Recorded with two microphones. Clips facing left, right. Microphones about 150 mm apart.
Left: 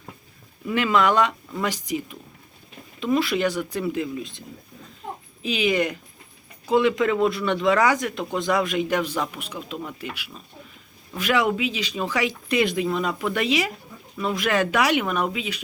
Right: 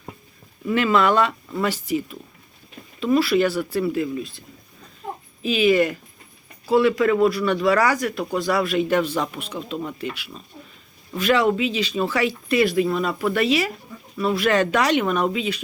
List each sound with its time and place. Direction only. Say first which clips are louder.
0.7 s speech: right 2 dB; 15° left (ahead or behind)